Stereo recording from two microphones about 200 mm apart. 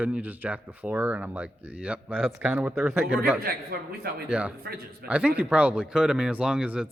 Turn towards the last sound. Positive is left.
turn(degrees=-5)  # may be behind; listen again after turning